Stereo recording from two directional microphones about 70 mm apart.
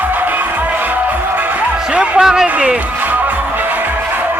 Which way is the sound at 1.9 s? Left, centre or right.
Centre.